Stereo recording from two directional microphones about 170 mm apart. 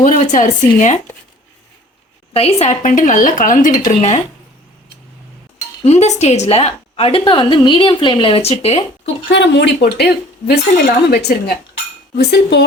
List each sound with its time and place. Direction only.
0.0 s speech: 45° left (ahead or behind)
2.3 s speech: 35° left (ahead or behind)
5.8 s a woman's voice: 40° left (ahead or behind)
9.0 s speech: 90° left; by 12.6 s 75° left (ahead or behind)